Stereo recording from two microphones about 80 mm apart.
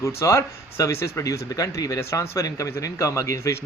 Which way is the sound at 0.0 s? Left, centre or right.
Left.